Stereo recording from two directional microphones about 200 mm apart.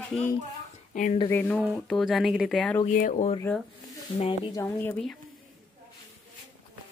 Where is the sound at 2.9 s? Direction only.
40° left (ahead or behind).